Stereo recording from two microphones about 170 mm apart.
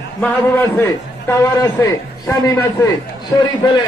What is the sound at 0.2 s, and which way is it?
A man's voice, 10° left (ahead or behind).